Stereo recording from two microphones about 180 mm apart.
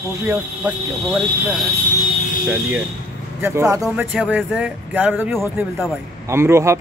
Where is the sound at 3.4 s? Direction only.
15° right (ahead or behind).